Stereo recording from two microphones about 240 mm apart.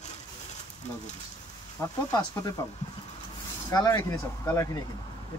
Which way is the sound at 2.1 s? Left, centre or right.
Centre.